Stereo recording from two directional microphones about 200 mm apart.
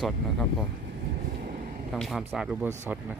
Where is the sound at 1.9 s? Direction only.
Centre (ahead or behind).